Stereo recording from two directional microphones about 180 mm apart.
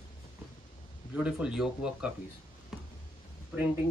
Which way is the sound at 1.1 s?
5° right (ahead or behind).